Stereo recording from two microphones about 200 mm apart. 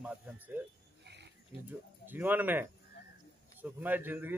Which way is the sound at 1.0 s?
60° right (ahead or behind).